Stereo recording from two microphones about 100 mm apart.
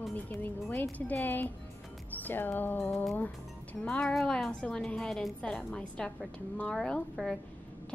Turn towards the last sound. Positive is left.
turn(degrees=5)  # may be behind; listen again after turning